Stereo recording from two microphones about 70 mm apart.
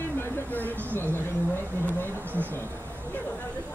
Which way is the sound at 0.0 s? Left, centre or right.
Left.